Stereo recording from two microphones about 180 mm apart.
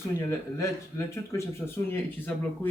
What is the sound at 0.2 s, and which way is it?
Speech, 15° left (ahead or behind).